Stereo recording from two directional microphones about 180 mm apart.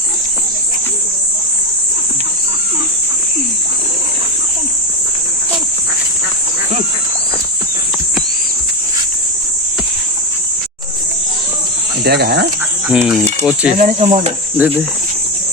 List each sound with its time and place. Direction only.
12.0 s speech: 60° right (ahead or behind)
12.9 s a sound: 5° right (ahead or behind)
13.4 s speech: 5° right (ahead or behind)
13.7 s speech: 45° right (ahead or behind)